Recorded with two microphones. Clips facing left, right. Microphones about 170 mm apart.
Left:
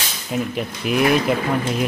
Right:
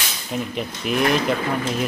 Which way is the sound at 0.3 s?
Centre (ahead or behind).